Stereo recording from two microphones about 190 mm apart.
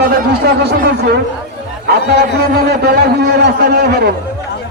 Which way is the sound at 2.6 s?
55° right (ahead or behind).